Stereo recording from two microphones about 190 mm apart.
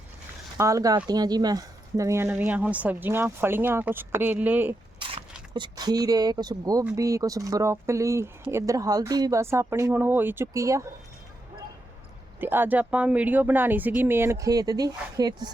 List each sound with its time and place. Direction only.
0.5 s speech: 15° right (ahead or behind)
4.9 s speech: 25° right (ahead or behind)
12.4 s speech: 10° right (ahead or behind)